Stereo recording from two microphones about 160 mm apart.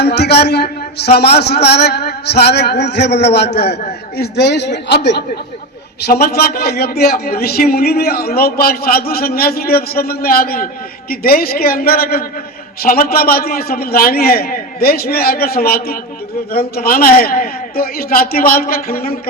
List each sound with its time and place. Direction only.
0.0 s a man's voice: 90° left
6.1 s a man's voice: 75° left (ahead or behind)